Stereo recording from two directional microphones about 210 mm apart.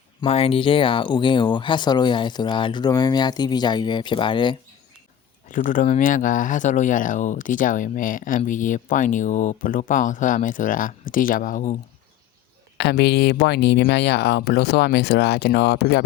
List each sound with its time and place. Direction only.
0.2 s speech: 30° left (ahead or behind)
5.5 s speech: 40° left (ahead or behind)
12.7 s speech: 50° left (ahead or behind)